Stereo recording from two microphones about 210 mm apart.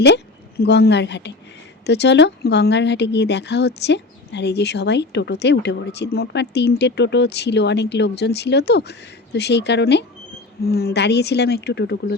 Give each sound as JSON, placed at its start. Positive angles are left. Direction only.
{"t": 0.0, "sound": "a woman's voice", "side_deg": 50}